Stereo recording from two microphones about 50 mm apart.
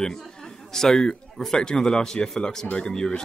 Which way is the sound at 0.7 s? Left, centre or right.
Centre.